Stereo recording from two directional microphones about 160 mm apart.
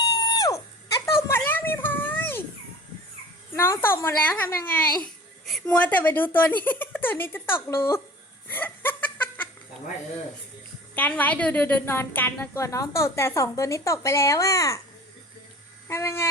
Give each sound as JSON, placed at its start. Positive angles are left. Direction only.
{"t": 0.0, "sound": "music", "side_deg": 25}
{"t": 1.3, "sound": "a sound", "side_deg": 15}
{"t": 3.5, "sound": "a woman's voice", "side_deg": 15}
{"t": 8.4, "sound": "laughter", "side_deg": 15}
{"t": 10.9, "sound": "a woman's voice", "side_deg": 10}
{"t": 15.9, "sound": "a woman's voice", "side_deg": 15}